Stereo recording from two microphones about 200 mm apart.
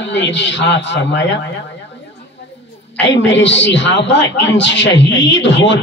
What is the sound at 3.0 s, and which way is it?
A man's voice, 65° left (ahead or behind).